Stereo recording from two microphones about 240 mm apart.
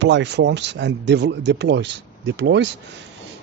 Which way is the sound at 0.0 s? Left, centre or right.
Right.